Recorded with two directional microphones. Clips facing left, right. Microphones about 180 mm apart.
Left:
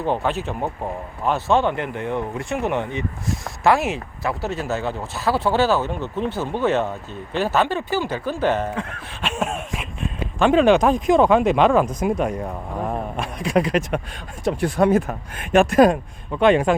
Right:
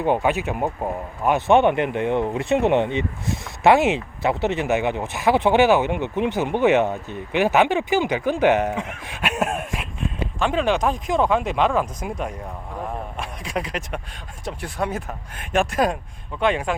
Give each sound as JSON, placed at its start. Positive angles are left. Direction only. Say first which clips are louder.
{"t": 0.0, "sound": "speech", "louder": "right 2 dB", "side_deg": -15}
{"t": 10.4, "sound": "speech", "louder": "left 6 dB", "side_deg": 55}
{"t": 16.4, "sound": "speech", "louder": "left 6 dB", "side_deg": 55}